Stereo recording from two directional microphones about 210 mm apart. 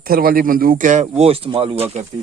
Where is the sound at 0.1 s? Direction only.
45° right (ahead or behind).